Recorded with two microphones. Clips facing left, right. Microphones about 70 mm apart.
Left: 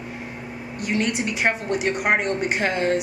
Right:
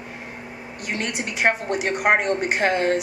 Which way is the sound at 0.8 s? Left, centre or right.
Right.